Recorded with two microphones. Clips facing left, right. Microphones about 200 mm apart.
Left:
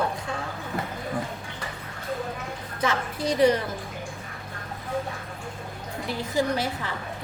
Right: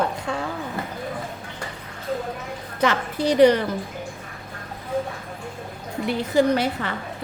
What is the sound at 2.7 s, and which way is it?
Speech, 70° right (ahead or behind).